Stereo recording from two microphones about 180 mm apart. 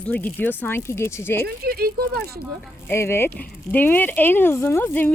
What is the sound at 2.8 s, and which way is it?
Speech, 15° left (ahead or behind).